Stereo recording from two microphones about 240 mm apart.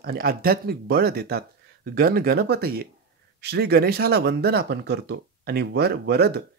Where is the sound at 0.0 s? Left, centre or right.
Right.